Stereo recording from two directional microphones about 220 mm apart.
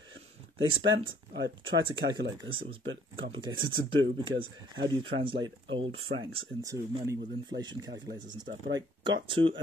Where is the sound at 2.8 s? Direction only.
60° right (ahead or behind).